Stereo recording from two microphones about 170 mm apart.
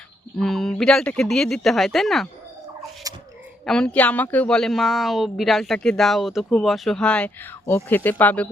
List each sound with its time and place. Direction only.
0.3 s a woman's voice: centre (ahead or behind)
3.1 s a sound: 20° right (ahead or behind)
3.7 s a woman's voice: 5° left (ahead or behind)